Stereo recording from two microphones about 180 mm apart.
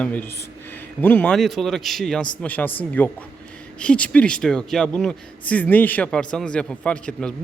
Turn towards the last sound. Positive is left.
turn(degrees=5)  # may be behind; listen again after turning